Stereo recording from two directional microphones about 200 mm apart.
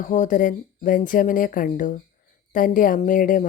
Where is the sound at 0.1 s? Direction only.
40° left (ahead or behind).